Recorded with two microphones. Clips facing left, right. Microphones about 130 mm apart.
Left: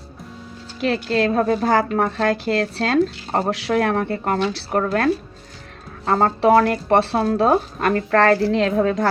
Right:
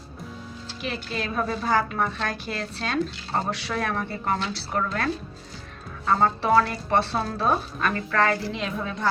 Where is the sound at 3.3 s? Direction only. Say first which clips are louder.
Left 7 dB; 65° left (ahead or behind).